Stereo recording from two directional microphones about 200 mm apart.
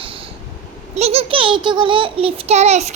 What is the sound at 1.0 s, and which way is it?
A child's voice, 30° right (ahead or behind).